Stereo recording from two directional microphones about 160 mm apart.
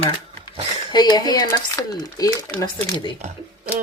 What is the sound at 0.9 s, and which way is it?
Speech, 25° left (ahead or behind).